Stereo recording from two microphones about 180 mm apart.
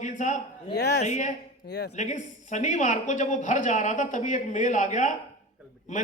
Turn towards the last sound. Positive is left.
turn(degrees=45)  # may be behind; listen again after turning